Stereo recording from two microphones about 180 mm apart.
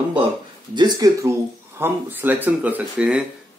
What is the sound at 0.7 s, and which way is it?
Speech, 25° right (ahead or behind).